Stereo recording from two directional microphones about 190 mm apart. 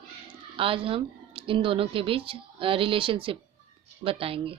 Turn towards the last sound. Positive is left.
turn(degrees=-30)  # may be behind; listen again after turning